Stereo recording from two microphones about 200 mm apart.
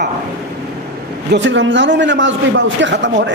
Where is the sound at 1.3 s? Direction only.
65° right (ahead or behind).